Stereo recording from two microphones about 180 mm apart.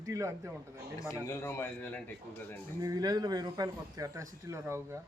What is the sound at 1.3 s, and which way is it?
Speech, 15° left (ahead or behind).